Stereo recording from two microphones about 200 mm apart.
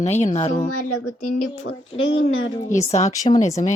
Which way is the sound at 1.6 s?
75° left (ahead or behind).